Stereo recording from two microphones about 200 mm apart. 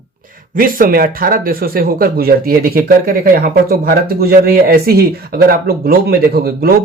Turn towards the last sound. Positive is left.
turn(degrees=-50)  # may be behind; listen again after turning